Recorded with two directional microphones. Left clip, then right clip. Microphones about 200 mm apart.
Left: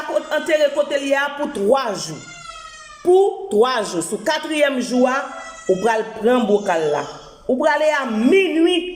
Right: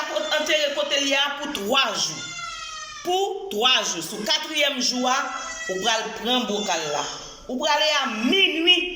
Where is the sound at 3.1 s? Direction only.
40° left (ahead or behind).